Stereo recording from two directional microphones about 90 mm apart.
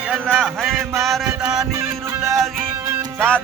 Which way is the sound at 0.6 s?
5° right (ahead or behind).